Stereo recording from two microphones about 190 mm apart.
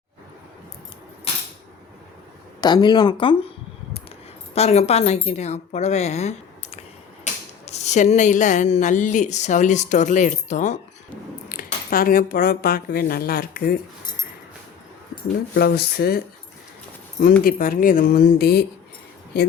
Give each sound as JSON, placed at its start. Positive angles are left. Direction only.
{"t": 2.6, "sound": "speech", "side_deg": 20}
{"t": 4.5, "sound": "speech", "side_deg": 35}
{"t": 7.6, "sound": "speech", "side_deg": 35}
{"t": 15.5, "sound": "speech", "side_deg": 55}
{"t": 17.4, "sound": "speech", "side_deg": 45}